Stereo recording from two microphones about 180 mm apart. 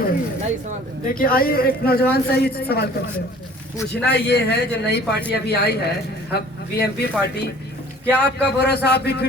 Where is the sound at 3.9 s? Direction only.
65° left (ahead or behind).